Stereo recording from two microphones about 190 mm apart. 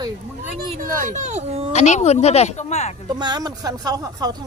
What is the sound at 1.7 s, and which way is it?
Speech, 35° left (ahead or behind).